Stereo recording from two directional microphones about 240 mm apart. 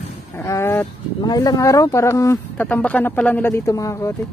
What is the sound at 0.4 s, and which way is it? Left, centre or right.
Speech, centre.